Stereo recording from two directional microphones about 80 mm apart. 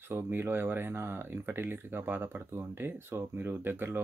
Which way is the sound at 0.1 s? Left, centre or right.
Right.